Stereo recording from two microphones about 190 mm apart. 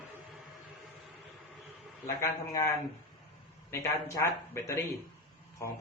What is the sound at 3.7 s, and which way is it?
A man's voice, 15° left (ahead or behind).